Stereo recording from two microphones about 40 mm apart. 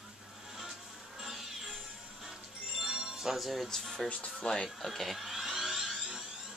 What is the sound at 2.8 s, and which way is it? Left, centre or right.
Music, centre.